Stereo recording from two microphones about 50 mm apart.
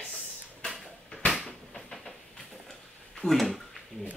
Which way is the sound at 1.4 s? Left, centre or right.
Centre.